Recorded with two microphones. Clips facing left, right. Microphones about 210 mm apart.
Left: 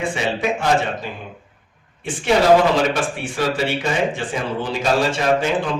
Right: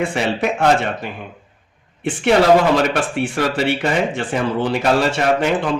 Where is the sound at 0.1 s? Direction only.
65° right (ahead or behind).